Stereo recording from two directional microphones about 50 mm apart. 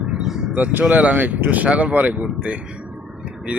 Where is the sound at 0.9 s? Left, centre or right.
Right.